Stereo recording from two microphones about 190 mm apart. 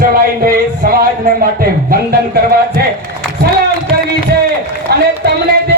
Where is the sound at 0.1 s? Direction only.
50° right (ahead or behind).